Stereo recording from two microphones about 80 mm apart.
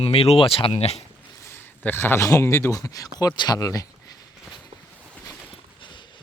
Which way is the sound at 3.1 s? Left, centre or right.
Left.